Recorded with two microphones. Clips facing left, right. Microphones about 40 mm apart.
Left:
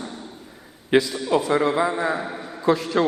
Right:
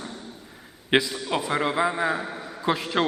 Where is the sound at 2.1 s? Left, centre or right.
Centre.